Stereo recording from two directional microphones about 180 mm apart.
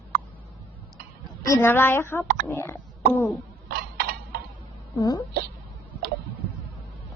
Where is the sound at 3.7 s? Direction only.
60° right (ahead or behind).